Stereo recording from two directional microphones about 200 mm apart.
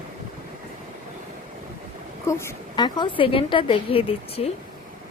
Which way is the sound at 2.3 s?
15° left (ahead or behind).